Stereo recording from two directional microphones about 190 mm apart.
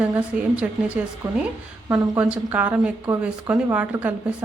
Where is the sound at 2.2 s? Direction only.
10° right (ahead or behind).